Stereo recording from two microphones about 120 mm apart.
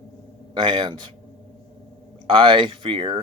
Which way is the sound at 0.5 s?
45° right (ahead or behind).